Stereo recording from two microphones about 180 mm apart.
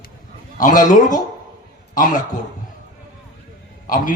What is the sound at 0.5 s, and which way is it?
A man's voice, 50° left (ahead or behind).